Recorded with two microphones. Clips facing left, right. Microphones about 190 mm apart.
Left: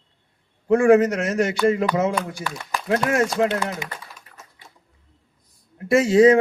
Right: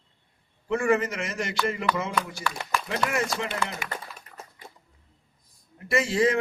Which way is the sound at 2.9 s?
80° left.